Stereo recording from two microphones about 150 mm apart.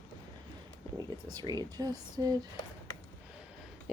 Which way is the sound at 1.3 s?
25° right (ahead or behind).